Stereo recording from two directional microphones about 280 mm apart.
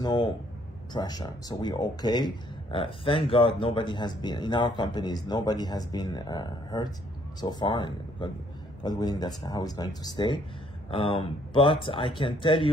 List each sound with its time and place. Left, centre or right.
0.0 s speech: centre